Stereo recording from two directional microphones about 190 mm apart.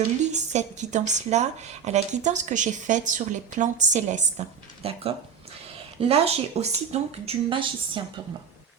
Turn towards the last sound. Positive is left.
turn(degrees=-25)  # may be behind; listen again after turning